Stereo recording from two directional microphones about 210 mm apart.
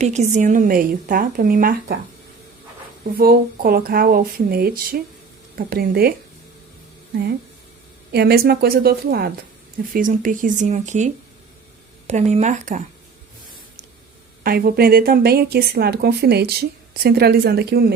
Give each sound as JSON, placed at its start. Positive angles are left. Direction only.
{"t": 0.0, "sound": "speech", "side_deg": -30}
{"t": 3.2, "sound": "speech", "side_deg": -45}
{"t": 8.1, "sound": "speech", "side_deg": -50}
{"t": 14.4, "sound": "speech", "side_deg": -45}